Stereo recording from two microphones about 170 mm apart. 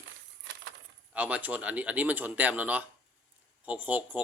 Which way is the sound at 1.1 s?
10° right (ahead or behind).